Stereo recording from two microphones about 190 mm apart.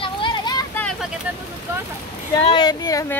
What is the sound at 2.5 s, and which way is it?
Speech, 20° left (ahead or behind).